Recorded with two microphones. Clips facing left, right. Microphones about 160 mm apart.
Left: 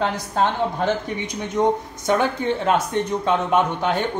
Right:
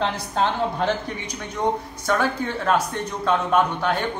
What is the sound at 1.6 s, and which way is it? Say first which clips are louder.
A man's voice: left 4 dB; 20° left (ahead or behind).